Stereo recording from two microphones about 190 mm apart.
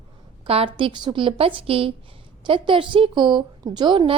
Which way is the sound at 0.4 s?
30° right (ahead or behind).